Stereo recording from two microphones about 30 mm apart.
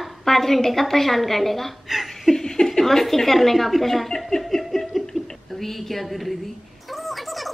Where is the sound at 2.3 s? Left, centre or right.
Left.